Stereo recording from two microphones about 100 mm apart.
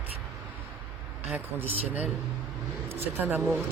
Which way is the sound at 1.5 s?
15° right (ahead or behind).